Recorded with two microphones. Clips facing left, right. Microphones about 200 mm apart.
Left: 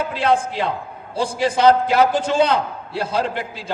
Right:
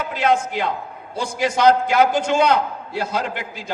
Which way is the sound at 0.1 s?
30° left (ahead or behind).